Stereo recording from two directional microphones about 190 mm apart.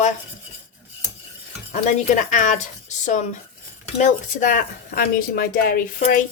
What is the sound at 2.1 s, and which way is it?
Speech, 40° left (ahead or behind).